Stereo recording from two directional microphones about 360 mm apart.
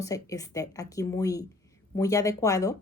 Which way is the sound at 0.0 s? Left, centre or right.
Centre.